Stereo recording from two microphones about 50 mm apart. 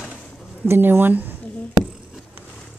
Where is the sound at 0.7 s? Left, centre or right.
Right.